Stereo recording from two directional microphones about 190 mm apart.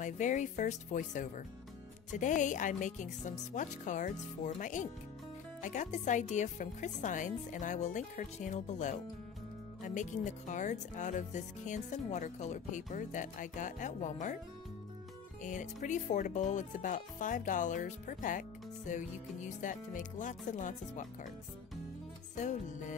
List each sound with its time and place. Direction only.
0.0 s speech: 40° left (ahead or behind)
15.4 s speech: 40° left (ahead or behind)
22.3 s speech: 40° left (ahead or behind)